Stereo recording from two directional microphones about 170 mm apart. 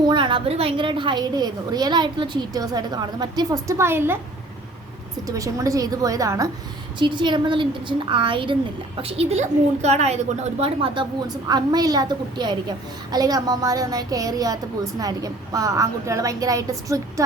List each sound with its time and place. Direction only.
0.0 s a woman's voice: 25° right (ahead or behind)
5.3 s a woman's voice: 20° right (ahead or behind)